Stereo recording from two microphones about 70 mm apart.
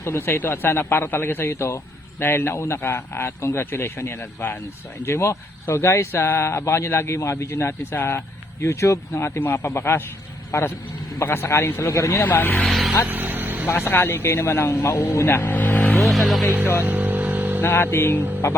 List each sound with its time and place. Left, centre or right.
0.0 s speech: left
8.6 s speech: left
12.2 s speech: left
12.6 s speech: centre
13.1 s vehicle: right
13.7 s speech: left
16.0 s speech: centre
16.8 s vehicle: right
17.6 s speech: left